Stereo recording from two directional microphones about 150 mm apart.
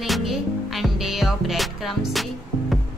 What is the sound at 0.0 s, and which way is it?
Music, centre (ahead or behind).